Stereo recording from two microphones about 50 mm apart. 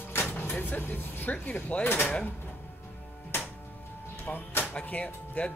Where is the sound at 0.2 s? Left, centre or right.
Left.